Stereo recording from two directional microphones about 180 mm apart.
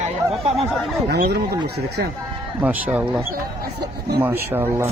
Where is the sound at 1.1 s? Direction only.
70° right (ahead or behind).